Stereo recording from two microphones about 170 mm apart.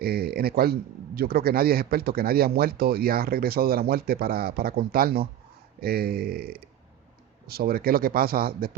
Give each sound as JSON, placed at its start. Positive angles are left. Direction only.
{"t": 0.0, "sound": "a man's voice", "side_deg": -65}